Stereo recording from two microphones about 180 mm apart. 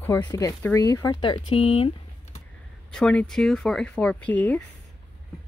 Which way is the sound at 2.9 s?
5° left (ahead or behind).